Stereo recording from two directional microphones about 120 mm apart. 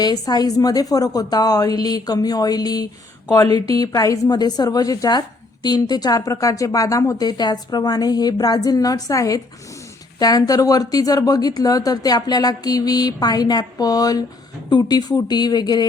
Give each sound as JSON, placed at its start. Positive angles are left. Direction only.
{"t": 0.0, "sound": "a woman's voice", "side_deg": 35}